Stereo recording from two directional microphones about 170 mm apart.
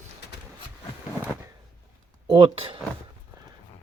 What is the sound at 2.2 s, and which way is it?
Speech, 25° right (ahead or behind).